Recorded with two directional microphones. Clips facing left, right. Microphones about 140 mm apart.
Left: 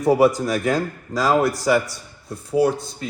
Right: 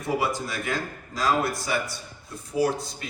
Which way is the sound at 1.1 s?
90° left.